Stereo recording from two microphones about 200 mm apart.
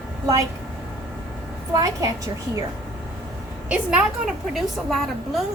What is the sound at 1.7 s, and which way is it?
Speech, 20° right (ahead or behind).